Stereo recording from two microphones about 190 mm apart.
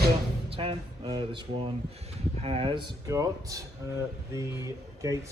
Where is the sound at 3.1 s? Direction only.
15° right (ahead or behind).